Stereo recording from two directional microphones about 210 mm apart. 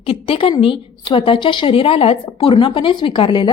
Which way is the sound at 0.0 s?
25° left (ahead or behind).